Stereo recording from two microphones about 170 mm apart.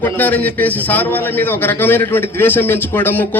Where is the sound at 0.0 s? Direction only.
10° left (ahead or behind).